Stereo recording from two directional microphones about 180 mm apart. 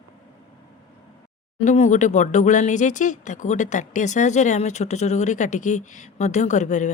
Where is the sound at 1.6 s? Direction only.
40° left (ahead or behind).